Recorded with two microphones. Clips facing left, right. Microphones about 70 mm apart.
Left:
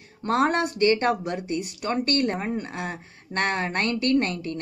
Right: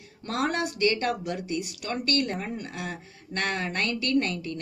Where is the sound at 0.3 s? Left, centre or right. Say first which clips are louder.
Left 6 dB; left.